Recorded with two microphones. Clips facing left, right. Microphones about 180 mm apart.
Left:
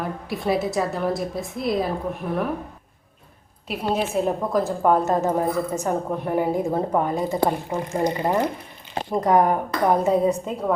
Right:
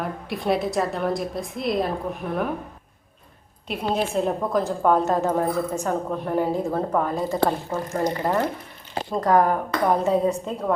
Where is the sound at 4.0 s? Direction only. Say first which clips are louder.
Even; 5° left (ahead or behind).